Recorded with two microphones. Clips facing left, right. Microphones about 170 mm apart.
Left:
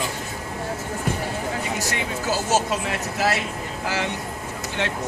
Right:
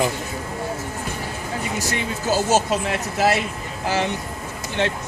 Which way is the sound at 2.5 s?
20° right (ahead or behind).